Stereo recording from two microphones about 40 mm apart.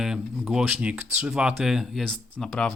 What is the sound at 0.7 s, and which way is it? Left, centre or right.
Speech, right.